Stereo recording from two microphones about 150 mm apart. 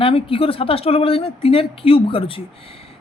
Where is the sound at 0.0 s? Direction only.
40° left (ahead or behind).